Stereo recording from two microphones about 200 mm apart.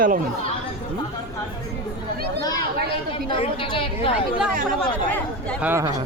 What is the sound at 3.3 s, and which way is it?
Speech, 25° left (ahead or behind).